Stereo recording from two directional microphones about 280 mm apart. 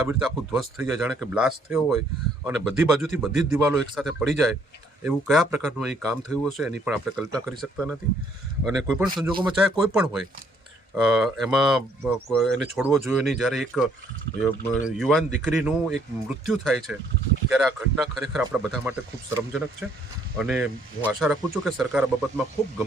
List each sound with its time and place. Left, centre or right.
0.0 s speech: centre